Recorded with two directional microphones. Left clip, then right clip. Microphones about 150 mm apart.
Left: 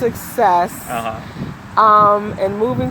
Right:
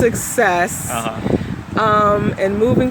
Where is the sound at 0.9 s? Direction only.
Centre (ahead or behind).